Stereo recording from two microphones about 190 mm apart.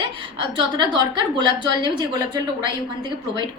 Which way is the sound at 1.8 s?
20° right (ahead or behind).